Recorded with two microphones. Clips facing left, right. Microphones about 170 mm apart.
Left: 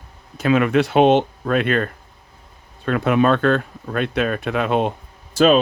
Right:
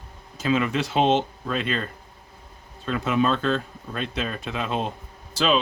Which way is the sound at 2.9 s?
60° left (ahead or behind).